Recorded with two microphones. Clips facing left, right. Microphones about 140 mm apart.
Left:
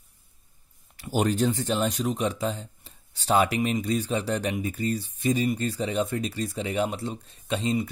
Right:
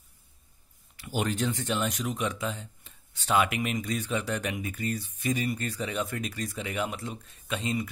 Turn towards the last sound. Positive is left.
turn(degrees=30)  # may be behind; listen again after turning